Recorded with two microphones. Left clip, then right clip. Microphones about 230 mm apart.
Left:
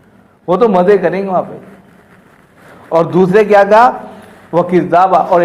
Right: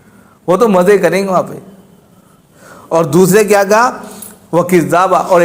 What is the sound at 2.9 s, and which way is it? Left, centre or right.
A man's voice, right.